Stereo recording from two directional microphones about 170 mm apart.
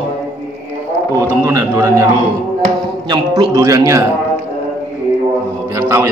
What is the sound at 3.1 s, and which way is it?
Speech, 20° right (ahead or behind).